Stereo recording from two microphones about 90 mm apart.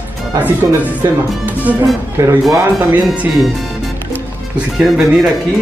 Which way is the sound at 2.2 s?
35° right (ahead or behind).